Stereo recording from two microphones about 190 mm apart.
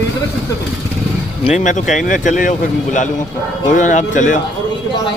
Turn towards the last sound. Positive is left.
turn(degrees=40)  # may be behind; listen again after turning